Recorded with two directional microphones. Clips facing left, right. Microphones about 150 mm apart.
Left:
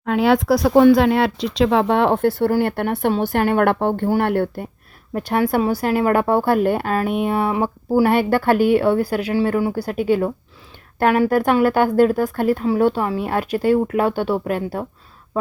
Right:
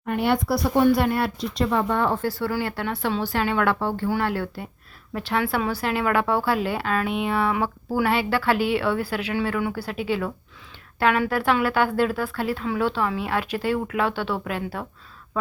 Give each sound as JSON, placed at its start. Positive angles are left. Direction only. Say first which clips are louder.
{"t": 0.0, "sound": "speech", "louder": "left 6 dB", "side_deg": 90}
{"t": 5.1, "sound": "speech", "louder": "left 6 dB", "side_deg": 45}